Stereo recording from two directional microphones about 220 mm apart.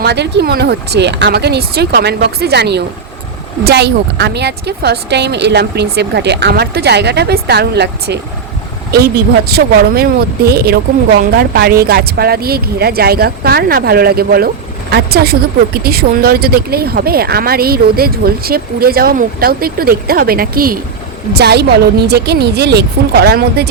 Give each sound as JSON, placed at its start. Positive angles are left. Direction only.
{"t": 0.0, "sound": "speech", "side_deg": -50}